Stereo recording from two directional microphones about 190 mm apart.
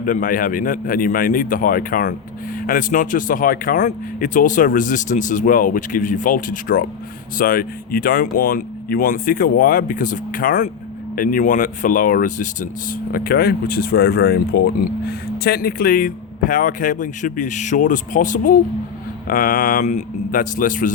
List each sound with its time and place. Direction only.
0.0 s speech: 45° left (ahead or behind)